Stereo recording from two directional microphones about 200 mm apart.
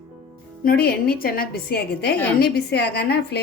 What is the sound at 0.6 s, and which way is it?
A woman's voice, 50° left (ahead or behind).